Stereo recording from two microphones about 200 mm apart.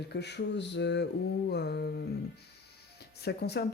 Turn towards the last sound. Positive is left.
turn(degrees=55)  # may be behind; listen again after turning